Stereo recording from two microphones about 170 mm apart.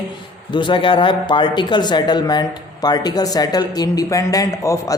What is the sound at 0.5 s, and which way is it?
Speech, 30° left (ahead or behind).